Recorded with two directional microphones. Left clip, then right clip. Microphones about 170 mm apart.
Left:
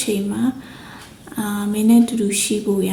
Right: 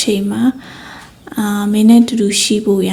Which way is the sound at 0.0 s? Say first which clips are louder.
Right 6 dB; 30° right (ahead or behind).